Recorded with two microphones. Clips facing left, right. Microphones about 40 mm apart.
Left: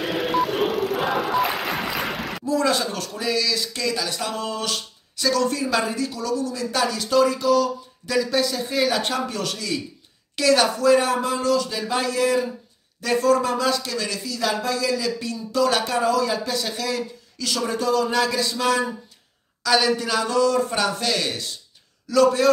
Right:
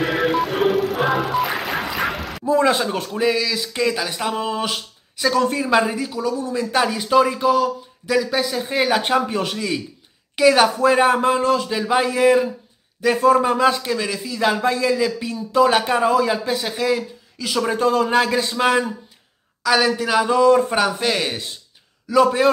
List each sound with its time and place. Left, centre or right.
0.3 s music: centre
2.4 s speech: right
8.1 s speech: centre
8.6 s speech: right
17.6 s speech: right
19.6 s speech: centre